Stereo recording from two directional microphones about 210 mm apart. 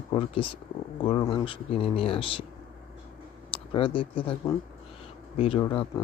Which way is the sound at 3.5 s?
25° left (ahead or behind).